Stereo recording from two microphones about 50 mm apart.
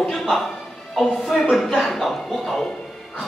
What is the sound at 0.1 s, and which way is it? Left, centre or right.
Music, centre.